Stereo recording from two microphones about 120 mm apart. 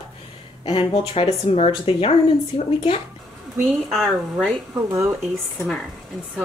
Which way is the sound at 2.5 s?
40° left (ahead or behind).